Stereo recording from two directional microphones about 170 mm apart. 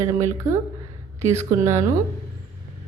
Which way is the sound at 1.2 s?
40° right (ahead or behind).